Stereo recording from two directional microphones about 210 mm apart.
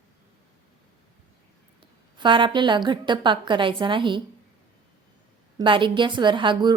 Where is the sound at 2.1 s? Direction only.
20° right (ahead or behind).